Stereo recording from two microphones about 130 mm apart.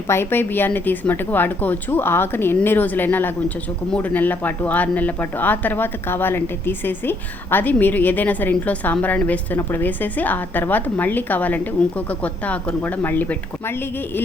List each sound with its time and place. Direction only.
0.1 s speech: 15° left (ahead or behind)